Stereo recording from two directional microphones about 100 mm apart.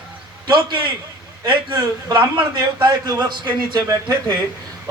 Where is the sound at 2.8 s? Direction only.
45° right (ahead or behind).